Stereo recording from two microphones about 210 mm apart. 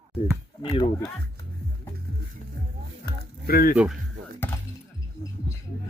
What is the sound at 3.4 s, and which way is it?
Speech, 45° left (ahead or behind).